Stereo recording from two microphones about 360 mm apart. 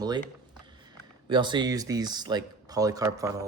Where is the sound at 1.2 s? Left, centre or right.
Centre.